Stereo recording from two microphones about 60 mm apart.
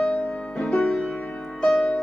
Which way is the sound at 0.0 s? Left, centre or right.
Centre.